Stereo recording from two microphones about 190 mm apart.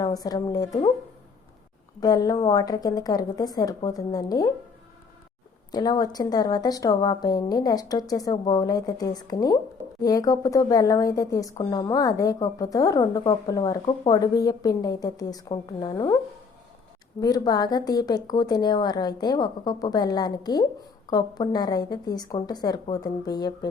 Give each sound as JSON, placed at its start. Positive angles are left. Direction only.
{"t": 0.0, "sound": "a woman's voice", "side_deg": 20}
{"t": 2.0, "sound": "a woman's voice", "side_deg": 20}
{"t": 5.7, "sound": "a woman's voice", "side_deg": 20}
{"t": 17.2, "sound": "a woman's voice", "side_deg": 20}